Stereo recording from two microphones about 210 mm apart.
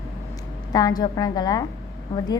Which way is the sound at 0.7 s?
20° left (ahead or behind).